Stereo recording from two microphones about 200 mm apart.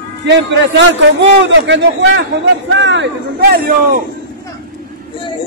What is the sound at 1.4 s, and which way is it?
A man's voice, 60° right (ahead or behind).